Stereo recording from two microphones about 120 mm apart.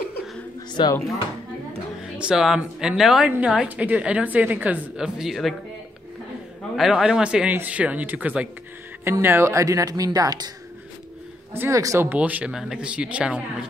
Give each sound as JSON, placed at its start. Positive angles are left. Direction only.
{"t": 0.8, "sound": "speech", "side_deg": 40}
{"t": 2.0, "sound": "a woman's voice", "side_deg": -5}
{"t": 6.8, "sound": "a woman's voice", "side_deg": -5}
{"t": 11.5, "sound": "a woman's voice", "side_deg": -15}
{"t": 12.2, "sound": "a woman's voice", "side_deg": -10}